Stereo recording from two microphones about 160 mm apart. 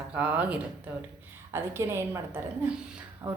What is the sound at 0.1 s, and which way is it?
A woman's voice, 10° right (ahead or behind).